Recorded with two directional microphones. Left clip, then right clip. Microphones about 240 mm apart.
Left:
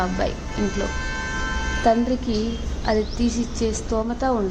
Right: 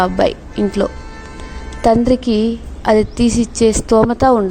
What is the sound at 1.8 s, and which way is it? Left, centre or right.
A woman's voice, right.